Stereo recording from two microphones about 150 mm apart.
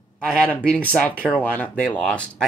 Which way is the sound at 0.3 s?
10° left (ahead or behind).